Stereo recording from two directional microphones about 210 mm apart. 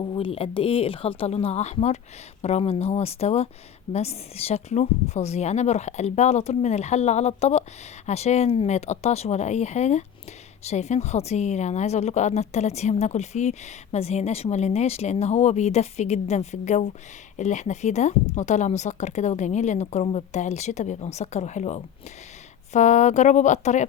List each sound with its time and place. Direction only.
0.1 s a woman's voice: 25° left (ahead or behind)